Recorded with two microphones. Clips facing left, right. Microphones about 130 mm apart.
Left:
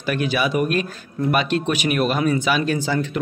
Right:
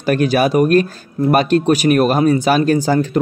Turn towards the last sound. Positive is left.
turn(degrees=-40)  # may be behind; listen again after turning